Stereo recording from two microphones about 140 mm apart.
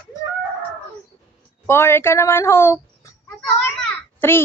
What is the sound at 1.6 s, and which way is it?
Speech, 20° left (ahead or behind).